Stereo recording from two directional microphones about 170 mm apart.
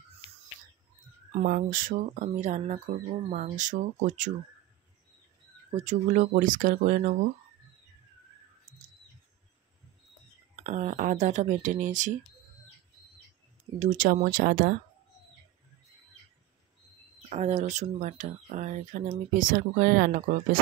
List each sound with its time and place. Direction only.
1.4 s speech: 55° right (ahead or behind)
5.8 s speech: 45° right (ahead or behind)
10.5 s speech: 45° right (ahead or behind)
13.7 s speech: 50° right (ahead or behind)
17.3 s speech: 40° right (ahead or behind)